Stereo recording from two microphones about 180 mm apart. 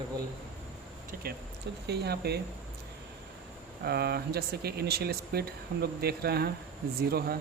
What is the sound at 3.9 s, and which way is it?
Speech, 60° right (ahead or behind).